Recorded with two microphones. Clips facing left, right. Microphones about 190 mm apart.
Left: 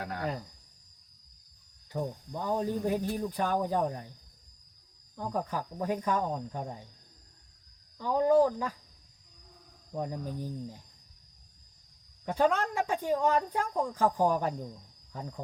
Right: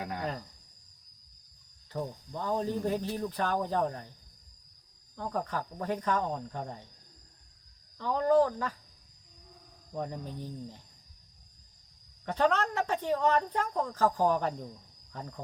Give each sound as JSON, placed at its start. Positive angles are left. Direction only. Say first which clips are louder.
{"t": 0.0, "sound": "speech", "louder": "even", "side_deg": -15}
{"t": 1.9, "sound": "a woman's voice", "louder": "left 2 dB", "side_deg": 15}
{"t": 5.1, "sound": "a woman's voice", "louder": "left 1 dB", "side_deg": 10}
{"t": 7.9, "sound": "a woman's voice", "louder": "left 1 dB", "side_deg": 10}
{"t": 9.9, "sound": "a woman's voice", "louder": "left 2 dB", "side_deg": 10}
{"t": 12.2, "sound": "a woman's voice", "louder": "left 1 dB", "side_deg": 10}